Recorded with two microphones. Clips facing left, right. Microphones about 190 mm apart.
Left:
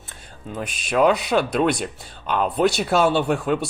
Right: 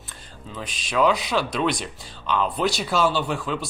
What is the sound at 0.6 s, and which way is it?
Speech, 55° left (ahead or behind).